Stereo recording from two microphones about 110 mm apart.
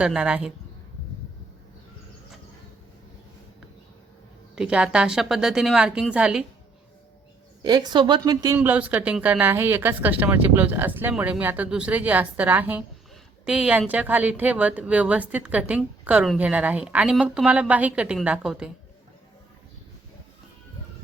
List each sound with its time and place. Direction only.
0.0 s speech: 10° right (ahead or behind)
4.5 s speech: 10° right (ahead or behind)
7.6 s speech: 40° right (ahead or behind)
8.5 s speech: 15° right (ahead or behind)